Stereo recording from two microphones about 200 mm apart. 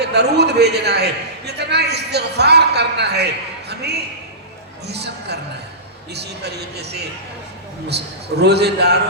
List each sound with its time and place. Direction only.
0.0 s a man's voice: 55° right (ahead or behind)
4.9 s music: 55° right (ahead or behind)
6.1 s a man's voice: 55° right (ahead or behind)